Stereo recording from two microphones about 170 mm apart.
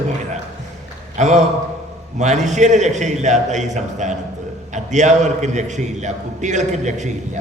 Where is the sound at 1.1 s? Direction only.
45° right (ahead or behind).